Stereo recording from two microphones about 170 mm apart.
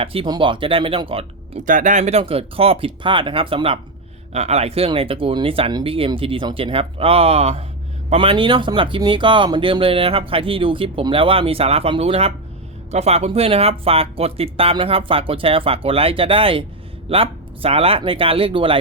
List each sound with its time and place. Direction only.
0.0 s speech: 35° right (ahead or behind)
1.6 s speech: 50° right (ahead or behind); by 18.8 s 30° right (ahead or behind)